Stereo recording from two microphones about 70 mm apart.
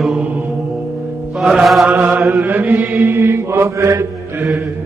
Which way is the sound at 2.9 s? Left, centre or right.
Right.